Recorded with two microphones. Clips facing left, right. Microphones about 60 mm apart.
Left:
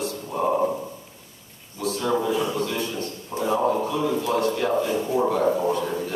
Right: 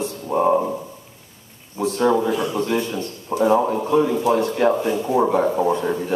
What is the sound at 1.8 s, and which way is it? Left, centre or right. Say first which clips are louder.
A man's voice: right 6 dB; right.